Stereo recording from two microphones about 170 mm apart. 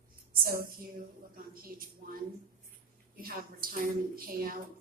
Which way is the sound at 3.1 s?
60° right (ahead or behind).